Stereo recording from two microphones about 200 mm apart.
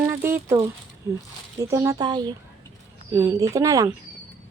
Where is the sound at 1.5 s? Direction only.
15° right (ahead or behind).